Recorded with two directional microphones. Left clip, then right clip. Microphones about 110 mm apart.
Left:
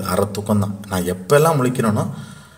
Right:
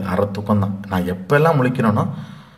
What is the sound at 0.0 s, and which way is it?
A man's voice, 25° left (ahead or behind).